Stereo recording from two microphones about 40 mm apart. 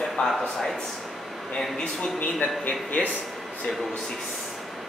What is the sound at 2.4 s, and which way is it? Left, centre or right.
Speech, left.